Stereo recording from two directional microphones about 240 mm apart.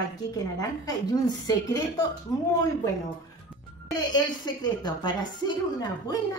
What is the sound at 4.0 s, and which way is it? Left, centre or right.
A woman's voice, centre.